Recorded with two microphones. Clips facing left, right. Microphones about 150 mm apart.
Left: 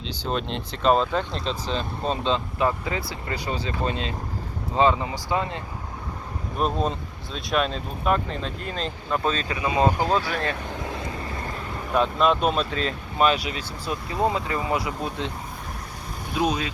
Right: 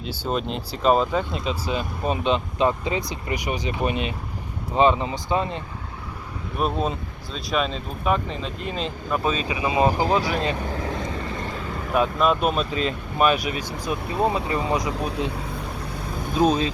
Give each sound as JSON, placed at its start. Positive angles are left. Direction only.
{"t": 0.1, "sound": "speech", "side_deg": -5}
{"t": 6.6, "sound": "speech", "side_deg": -5}
{"t": 9.6, "sound": "speech", "side_deg": -25}
{"t": 9.8, "sound": "speech", "side_deg": -10}
{"t": 10.8, "sound": "vehicle", "side_deg": 0}
{"t": 11.9, "sound": "speech", "side_deg": -5}
{"t": 16.3, "sound": "speech", "side_deg": -35}